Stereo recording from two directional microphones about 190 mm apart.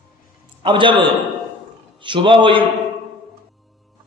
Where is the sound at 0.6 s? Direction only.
25° right (ahead or behind).